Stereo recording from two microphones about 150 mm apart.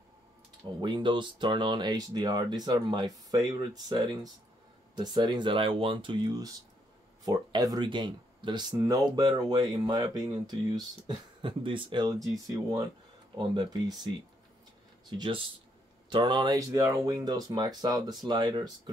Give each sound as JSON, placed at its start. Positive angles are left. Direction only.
{"t": 0.7, "sound": "speech", "side_deg": -30}